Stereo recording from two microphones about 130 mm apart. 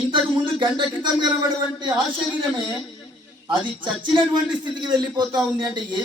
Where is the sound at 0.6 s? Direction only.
35° right (ahead or behind).